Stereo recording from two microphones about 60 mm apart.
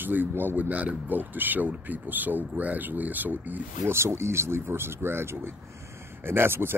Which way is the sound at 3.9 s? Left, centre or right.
Right.